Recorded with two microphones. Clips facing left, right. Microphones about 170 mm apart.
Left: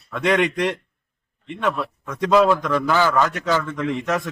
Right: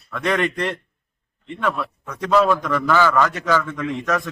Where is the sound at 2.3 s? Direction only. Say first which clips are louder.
Left 1 dB; 20° left (ahead or behind).